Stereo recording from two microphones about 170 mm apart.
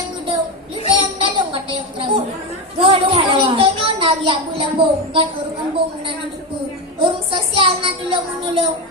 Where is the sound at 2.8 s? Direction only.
30° right (ahead or behind).